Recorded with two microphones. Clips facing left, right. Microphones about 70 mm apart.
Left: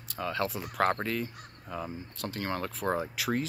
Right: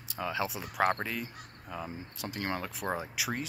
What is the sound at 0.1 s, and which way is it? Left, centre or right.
Speech, centre.